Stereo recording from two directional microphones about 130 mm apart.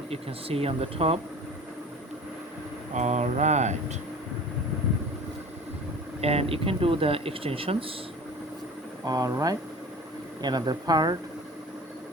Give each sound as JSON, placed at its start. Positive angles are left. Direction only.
{"t": 0.1, "sound": "speech", "side_deg": -50}
{"t": 2.9, "sound": "speech", "side_deg": -60}
{"t": 6.2, "sound": "speech", "side_deg": -50}
{"t": 9.0, "sound": "speech", "side_deg": -30}